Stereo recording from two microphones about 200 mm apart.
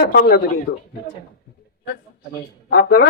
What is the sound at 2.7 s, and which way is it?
Speech, 50° left (ahead or behind).